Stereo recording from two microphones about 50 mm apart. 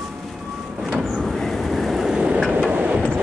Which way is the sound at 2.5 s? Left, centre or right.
Right.